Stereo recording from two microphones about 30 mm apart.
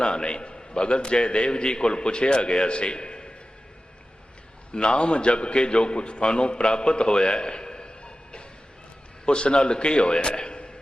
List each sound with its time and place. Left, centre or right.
0.0 s a man's voice: left
4.7 s a man's voice: left